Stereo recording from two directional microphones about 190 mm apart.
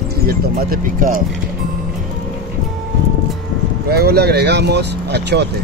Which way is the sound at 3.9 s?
55° right (ahead or behind).